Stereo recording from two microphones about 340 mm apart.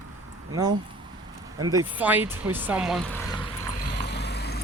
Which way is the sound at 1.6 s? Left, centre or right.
Centre.